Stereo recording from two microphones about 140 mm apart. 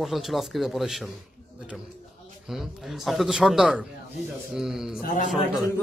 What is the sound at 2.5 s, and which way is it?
A man's voice, centre (ahead or behind).